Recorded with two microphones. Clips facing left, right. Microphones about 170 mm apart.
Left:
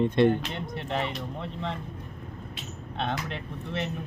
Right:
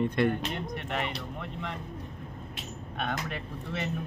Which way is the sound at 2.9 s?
25° left (ahead or behind).